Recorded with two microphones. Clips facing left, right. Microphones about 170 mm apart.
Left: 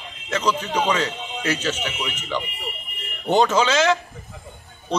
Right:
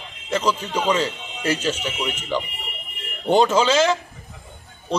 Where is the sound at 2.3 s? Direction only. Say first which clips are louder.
Right 2 dB; 5° right (ahead or behind).